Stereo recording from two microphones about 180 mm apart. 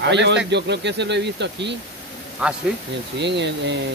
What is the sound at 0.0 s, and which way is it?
Speech, 75° right (ahead or behind).